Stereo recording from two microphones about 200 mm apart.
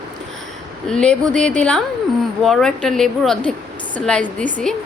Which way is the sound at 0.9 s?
5° left (ahead or behind).